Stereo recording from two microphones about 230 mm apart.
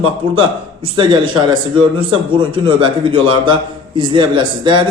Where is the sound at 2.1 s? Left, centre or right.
Right.